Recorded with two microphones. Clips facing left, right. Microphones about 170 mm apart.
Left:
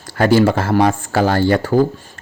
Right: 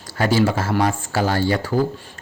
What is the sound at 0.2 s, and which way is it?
Speech, 55° left (ahead or behind).